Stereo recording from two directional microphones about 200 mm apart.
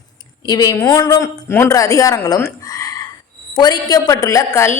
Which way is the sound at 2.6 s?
15° left (ahead or behind).